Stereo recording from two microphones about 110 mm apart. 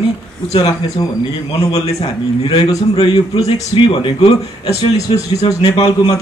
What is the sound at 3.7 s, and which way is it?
A man's voice, 55° left (ahead or behind).